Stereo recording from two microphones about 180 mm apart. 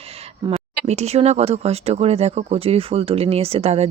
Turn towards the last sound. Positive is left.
turn(degrees=-35)  # may be behind; listen again after turning